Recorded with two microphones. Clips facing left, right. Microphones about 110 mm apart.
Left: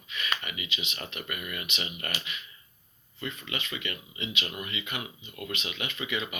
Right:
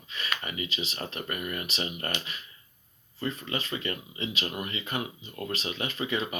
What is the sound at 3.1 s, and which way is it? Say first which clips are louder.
Speech: right 4 dB; 35° right (ahead or behind).